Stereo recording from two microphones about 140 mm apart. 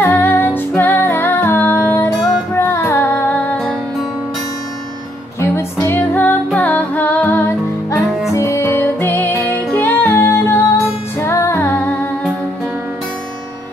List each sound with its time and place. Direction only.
0.0 s female singing: 15° left (ahead or behind)
2.7 s music: 20° left (ahead or behind)
5.4 s music: 15° left (ahead or behind)